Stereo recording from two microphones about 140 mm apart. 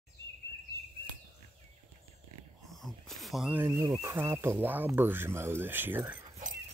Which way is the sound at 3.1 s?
Centre (ahead or behind).